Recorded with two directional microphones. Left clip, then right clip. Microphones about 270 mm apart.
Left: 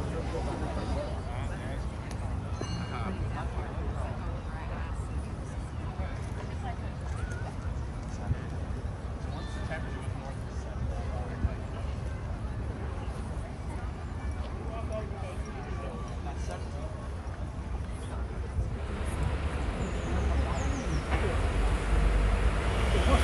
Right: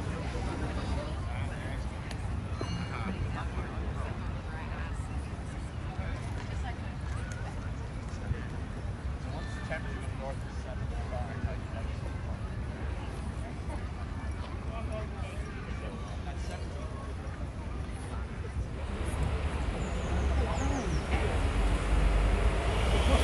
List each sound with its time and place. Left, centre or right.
2.9 s vehicle: left
19.1 s vehicle: centre